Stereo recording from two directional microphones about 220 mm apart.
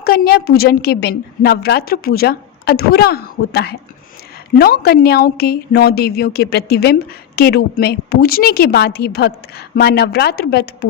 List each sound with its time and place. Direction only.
0.0 s a woman's voice: 45° left (ahead or behind)